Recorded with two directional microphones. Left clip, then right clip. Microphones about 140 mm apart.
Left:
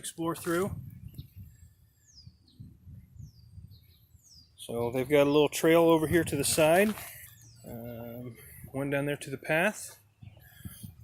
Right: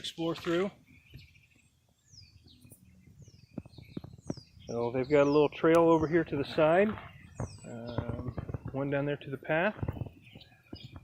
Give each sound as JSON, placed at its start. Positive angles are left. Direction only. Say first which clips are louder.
{"t": 0.0, "sound": "speech", "louder": "even", "side_deg": 0}
{"t": 4.6, "sound": "speech", "louder": "left 1 dB", "side_deg": 50}
{"t": 7.6, "sound": "a sound", "louder": "even", "side_deg": 25}
{"t": 8.7, "sound": "speech", "louder": "left 1 dB", "side_deg": 45}